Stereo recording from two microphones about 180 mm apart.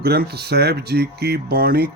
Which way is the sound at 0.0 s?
60° right (ahead or behind).